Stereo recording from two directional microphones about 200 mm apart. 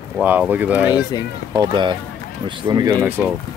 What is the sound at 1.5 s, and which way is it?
Speech, 20° right (ahead or behind).